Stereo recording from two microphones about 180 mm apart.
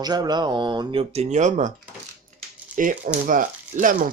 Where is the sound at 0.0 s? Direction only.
20° right (ahead or behind); by 1.7 s 40° right (ahead or behind).